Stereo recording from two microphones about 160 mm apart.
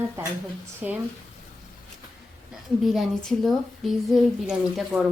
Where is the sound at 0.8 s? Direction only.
5° right (ahead or behind).